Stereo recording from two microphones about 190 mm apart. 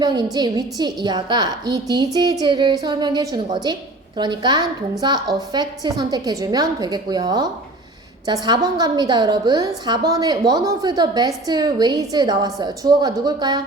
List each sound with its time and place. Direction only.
0.0 s a woman's voice: 20° right (ahead or behind)